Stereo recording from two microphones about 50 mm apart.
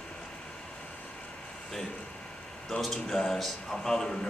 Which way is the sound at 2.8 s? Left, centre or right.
Centre.